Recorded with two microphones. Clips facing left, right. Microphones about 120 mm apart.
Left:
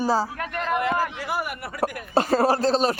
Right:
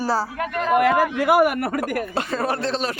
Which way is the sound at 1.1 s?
65° right (ahead or behind).